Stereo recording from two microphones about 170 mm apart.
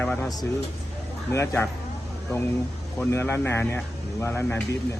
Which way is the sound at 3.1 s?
15° left (ahead or behind).